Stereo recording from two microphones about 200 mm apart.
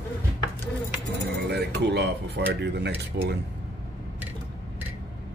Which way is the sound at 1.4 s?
55° right (ahead or behind).